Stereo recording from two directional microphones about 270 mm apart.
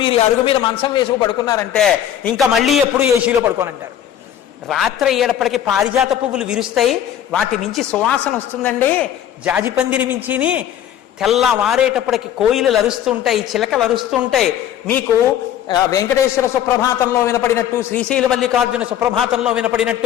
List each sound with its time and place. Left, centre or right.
0.0 s a man's voice: centre
1.7 s a man's voice: centre
4.7 s a man's voice: centre
9.4 s a man's voice: centre